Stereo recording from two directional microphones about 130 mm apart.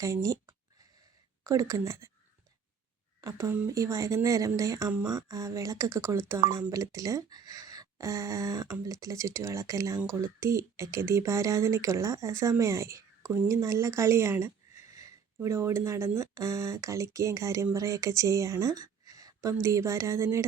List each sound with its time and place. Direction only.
0.0 s speech: 25° right (ahead or behind)
3.2 s speech: 25° right (ahead or behind)